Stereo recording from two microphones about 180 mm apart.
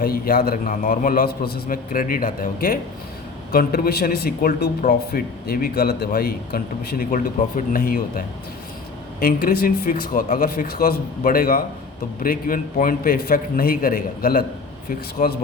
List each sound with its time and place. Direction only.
0.0 s a man's voice: 55° left (ahead or behind)
9.2 s a man's voice: 55° left (ahead or behind)